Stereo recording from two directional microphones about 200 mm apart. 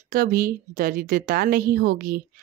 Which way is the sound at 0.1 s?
45° right (ahead or behind).